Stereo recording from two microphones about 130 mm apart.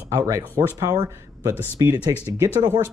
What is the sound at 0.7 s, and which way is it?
Speech, 25° right (ahead or behind).